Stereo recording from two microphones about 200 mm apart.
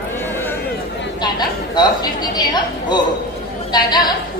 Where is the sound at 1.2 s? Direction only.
20° left (ahead or behind).